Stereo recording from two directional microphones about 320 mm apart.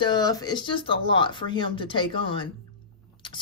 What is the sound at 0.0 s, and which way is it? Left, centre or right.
Speech, centre.